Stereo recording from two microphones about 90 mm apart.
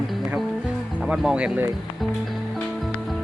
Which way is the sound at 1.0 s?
10° right (ahead or behind).